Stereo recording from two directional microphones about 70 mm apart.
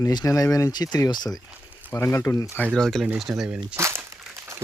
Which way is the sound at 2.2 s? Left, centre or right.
Left.